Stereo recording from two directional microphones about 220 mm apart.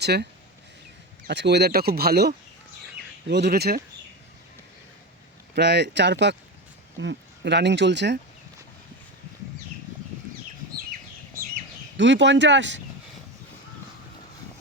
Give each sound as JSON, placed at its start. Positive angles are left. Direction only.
{"t": 0.0, "sound": "speech", "side_deg": -50}
{"t": 1.3, "sound": "speech", "side_deg": -50}
{"t": 5.5, "sound": "speech", "side_deg": -50}
{"t": 11.9, "sound": "speech", "side_deg": -55}